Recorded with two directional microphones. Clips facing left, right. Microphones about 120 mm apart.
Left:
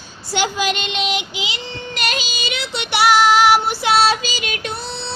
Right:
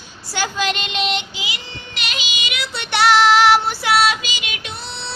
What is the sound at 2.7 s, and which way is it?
Child singing, 5° left (ahead or behind).